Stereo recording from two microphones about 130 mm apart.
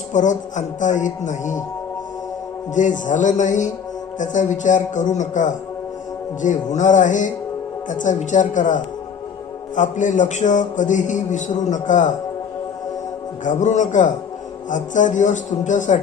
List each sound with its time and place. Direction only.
0.1 s a man's voice: 70° left (ahead or behind)
2.7 s a man's voice: 75° left (ahead or behind)
13.4 s a man's voice: 70° left (ahead or behind)